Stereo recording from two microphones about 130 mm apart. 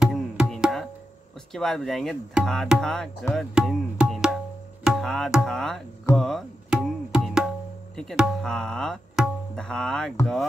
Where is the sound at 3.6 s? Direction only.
5° right (ahead or behind).